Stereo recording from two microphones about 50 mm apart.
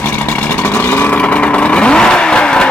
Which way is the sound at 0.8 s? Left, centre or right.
Left.